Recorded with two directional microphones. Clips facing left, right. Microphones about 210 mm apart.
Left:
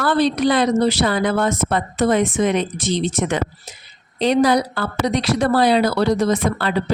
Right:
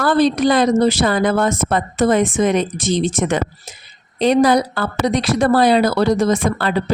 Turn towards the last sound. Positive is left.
turn(degrees=-45)  # may be behind; listen again after turning